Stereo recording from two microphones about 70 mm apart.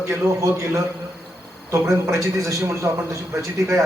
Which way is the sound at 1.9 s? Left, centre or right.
Right.